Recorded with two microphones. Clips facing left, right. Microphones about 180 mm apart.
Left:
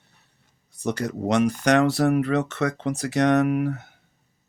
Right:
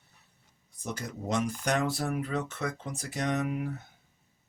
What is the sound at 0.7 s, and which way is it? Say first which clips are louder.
Speech: left 11 dB; 75° left (ahead or behind).